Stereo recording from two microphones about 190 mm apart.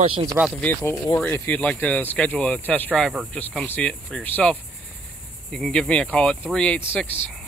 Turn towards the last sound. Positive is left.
turn(degrees=5)  # may be behind; listen again after turning